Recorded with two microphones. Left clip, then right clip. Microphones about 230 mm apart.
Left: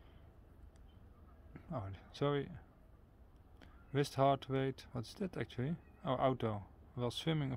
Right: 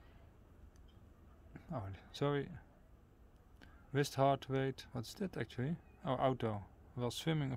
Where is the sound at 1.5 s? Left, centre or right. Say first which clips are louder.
Left 1 dB; centre.